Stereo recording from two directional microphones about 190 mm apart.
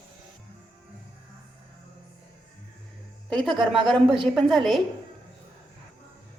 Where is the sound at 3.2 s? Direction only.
Centre (ahead or behind).